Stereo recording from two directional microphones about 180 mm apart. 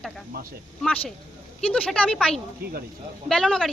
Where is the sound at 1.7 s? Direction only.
5° left (ahead or behind).